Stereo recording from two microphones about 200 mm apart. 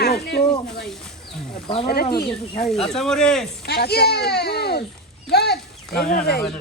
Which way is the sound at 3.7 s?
55° left (ahead or behind).